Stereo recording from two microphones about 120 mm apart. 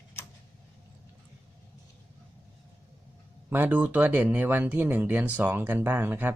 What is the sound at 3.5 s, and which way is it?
Speech, 15° right (ahead or behind).